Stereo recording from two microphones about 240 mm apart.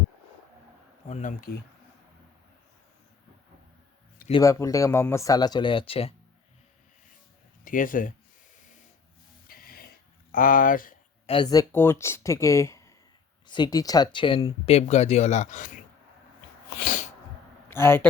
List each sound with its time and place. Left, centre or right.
1.0 s speech: left
4.3 s speech: centre
7.6 s speech: left
9.5 s music: left
10.3 s speech: left
11.3 s speech: centre
16.6 s sneeze: left
17.7 s speech: centre